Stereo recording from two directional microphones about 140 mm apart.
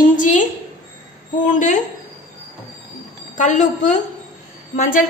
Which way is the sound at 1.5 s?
60° left (ahead or behind).